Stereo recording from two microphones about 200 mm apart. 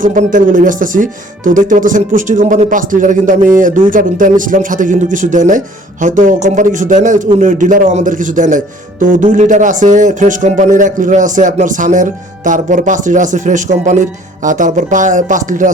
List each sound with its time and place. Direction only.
0.0 s speech: 40° right (ahead or behind)